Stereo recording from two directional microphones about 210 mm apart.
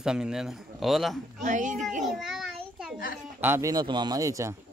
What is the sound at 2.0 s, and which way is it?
A child's voice, centre (ahead or behind).